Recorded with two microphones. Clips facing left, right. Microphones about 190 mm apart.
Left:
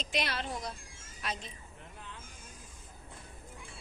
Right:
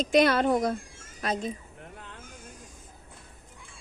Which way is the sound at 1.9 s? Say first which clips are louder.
Even; 60° right (ahead or behind).